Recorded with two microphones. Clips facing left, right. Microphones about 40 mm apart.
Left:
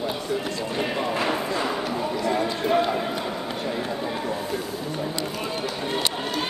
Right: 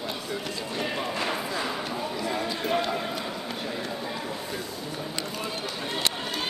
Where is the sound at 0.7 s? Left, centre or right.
Centre.